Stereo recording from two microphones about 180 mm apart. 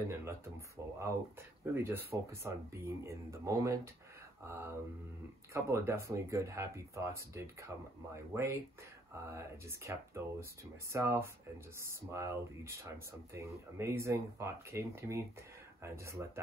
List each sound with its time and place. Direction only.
0.1 s speech: 15° right (ahead or behind)